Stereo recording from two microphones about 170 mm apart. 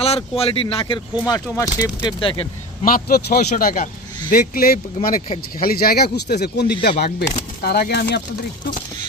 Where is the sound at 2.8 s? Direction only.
60° left (ahead or behind).